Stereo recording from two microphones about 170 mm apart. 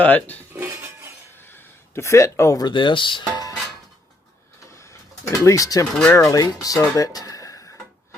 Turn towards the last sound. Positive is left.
turn(degrees=20)  # may be behind; listen again after turning